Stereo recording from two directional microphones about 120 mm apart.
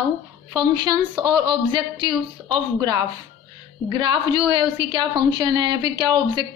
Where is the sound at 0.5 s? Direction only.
35° right (ahead or behind).